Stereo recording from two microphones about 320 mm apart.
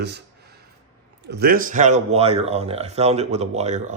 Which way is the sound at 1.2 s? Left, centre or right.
Right.